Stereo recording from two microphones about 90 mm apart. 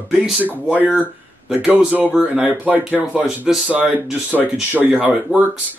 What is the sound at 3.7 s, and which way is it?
Speech, 20° right (ahead or behind).